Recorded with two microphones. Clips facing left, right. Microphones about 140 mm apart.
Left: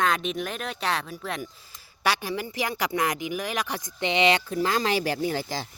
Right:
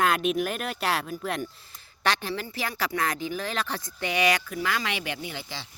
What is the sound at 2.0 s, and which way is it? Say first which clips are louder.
Speech: left 1 dB; 10° left (ahead or behind).